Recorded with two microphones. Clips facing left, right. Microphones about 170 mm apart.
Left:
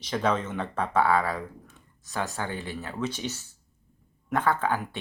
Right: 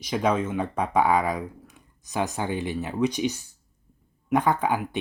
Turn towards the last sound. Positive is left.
turn(degrees=-15)  # may be behind; listen again after turning